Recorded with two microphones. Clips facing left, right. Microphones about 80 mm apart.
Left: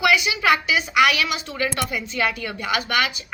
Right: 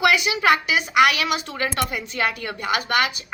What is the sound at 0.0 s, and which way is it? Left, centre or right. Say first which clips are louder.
A woman's voice: right 1 dB; right.